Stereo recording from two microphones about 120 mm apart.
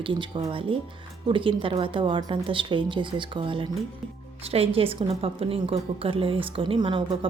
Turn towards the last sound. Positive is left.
turn(degrees=-45)  # may be behind; listen again after turning